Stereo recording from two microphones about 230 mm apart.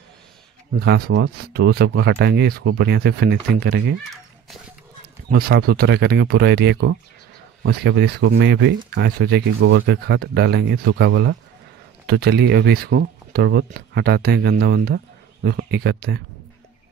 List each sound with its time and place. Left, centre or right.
0.7 s speech: right
5.3 s speech: right